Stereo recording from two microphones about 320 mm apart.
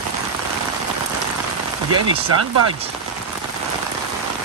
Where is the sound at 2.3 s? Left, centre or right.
Right.